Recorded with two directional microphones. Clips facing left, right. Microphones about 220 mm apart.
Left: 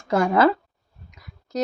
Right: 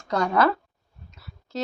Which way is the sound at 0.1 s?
25° left (ahead or behind).